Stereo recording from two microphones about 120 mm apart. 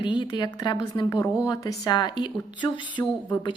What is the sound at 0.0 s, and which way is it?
Speech, 40° left (ahead or behind).